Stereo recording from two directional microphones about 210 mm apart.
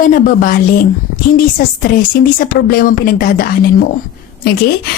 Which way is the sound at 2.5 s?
45° left (ahead or behind).